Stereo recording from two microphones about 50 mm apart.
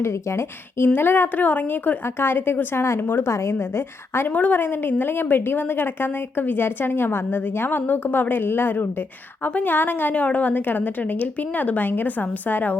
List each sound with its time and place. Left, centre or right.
0.0 s speech: left
0.9 s a woman's voice: left
2.0 s a woman's voice: left
3.0 s a woman's voice: left
3.3 s a woman's voice: left
4.3 s a woman's voice: left
10.2 s a woman's voice: left